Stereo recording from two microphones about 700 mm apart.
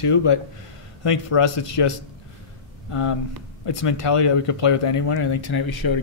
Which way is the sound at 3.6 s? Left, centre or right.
Left.